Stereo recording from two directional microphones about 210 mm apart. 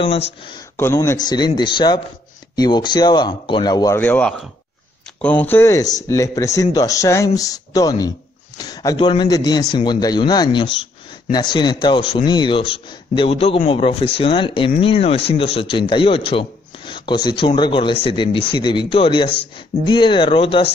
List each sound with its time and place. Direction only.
0.0 s a man's voice: 25° left (ahead or behind)
0.7 s a man's voice: 10° left (ahead or behind)